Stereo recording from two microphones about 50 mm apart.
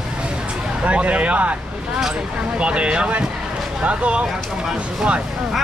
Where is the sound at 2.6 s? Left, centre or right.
Right.